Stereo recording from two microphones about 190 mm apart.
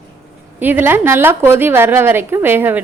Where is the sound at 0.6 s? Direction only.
10° right (ahead or behind).